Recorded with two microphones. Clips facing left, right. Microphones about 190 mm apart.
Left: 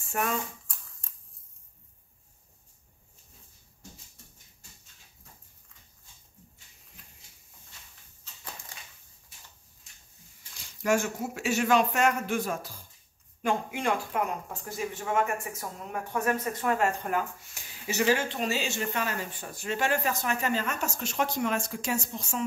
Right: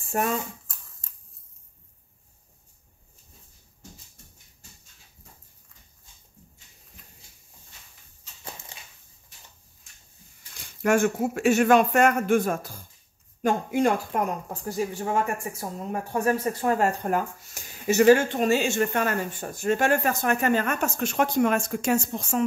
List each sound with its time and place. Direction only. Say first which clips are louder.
0.0 s speech: right 4 dB; 35° right (ahead or behind)
8.7 s a sound: right 2 dB; 25° right (ahead or behind)
10.6 s speech: right 5 dB; 55° right (ahead or behind)